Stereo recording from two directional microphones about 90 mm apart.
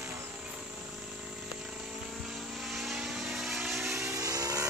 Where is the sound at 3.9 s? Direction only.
35° right (ahead or behind).